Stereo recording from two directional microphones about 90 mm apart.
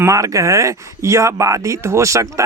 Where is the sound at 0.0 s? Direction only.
35° right (ahead or behind).